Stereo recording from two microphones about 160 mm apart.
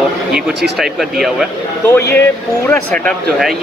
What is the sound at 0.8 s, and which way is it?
Speech, centre (ahead or behind).